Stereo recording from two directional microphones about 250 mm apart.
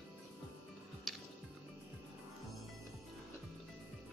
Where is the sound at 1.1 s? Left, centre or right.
Centre.